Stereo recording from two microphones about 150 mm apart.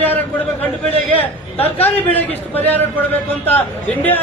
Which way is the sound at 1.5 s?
40° left (ahead or behind).